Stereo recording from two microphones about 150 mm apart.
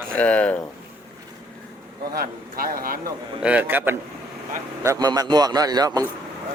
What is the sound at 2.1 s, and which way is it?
Speech, 80° right.